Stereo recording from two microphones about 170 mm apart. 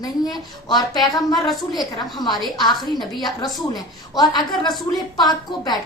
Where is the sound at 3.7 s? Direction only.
25° left (ahead or behind).